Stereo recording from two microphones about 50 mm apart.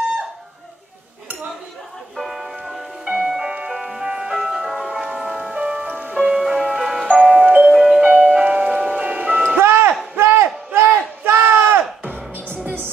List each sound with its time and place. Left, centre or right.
2.1 s music: centre
4.3 s ice cream truck: centre
5.0 s music: right
6.3 s music: centre
7.2 s music: right
7.7 s music: centre
8.0 s music: right
9.6 s a sound: right
12.6 s music: right